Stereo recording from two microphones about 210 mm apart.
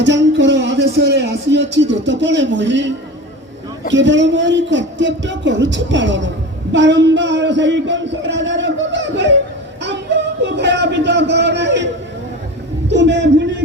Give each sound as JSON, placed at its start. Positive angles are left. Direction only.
{"t": 0.0, "sound": "speech", "side_deg": -60}
{"t": 3.9, "sound": "speech", "side_deg": -60}
{"t": 12.9, "sound": "speech", "side_deg": -55}